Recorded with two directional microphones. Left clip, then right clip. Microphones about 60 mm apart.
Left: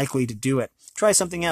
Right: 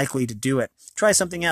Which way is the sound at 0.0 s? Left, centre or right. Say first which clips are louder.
Even; right.